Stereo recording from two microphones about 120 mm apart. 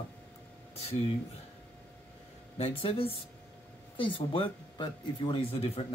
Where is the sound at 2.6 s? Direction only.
50° left (ahead or behind).